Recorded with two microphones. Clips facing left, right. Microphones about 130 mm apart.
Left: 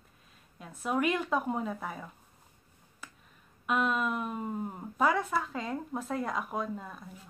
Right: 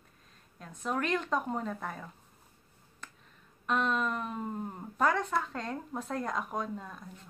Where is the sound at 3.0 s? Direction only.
5° left (ahead or behind).